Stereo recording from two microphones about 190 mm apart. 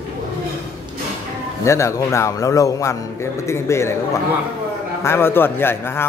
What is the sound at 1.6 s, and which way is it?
A man's voice, 15° left (ahead or behind).